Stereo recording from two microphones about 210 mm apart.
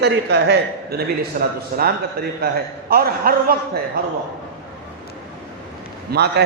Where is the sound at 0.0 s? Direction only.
55° right (ahead or behind).